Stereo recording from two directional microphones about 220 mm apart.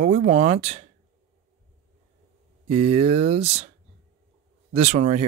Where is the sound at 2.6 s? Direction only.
30° right (ahead or behind).